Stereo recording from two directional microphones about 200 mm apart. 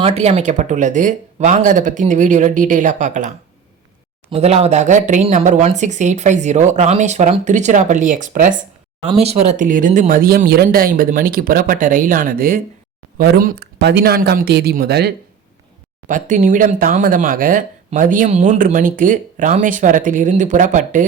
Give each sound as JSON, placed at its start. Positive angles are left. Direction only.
{"t": 0.0, "sound": "speech", "side_deg": -30}
{"t": 16.0, "sound": "speech", "side_deg": -40}